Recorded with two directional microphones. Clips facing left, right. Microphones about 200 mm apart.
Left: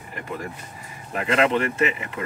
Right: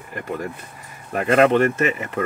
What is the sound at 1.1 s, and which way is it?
Speech, 50° right (ahead or behind).